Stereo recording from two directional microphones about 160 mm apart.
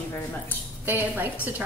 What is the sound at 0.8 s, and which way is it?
Speech, 10° right (ahead or behind).